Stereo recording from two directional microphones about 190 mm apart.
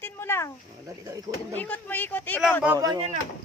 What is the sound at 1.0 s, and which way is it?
Speech, 15° right (ahead or behind).